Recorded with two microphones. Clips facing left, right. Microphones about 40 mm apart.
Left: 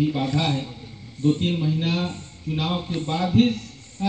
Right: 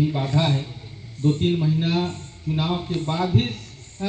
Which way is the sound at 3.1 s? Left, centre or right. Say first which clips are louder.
Left 5 dB; centre.